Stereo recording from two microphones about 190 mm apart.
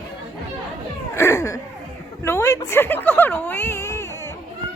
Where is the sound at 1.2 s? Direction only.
15° left (ahead or behind).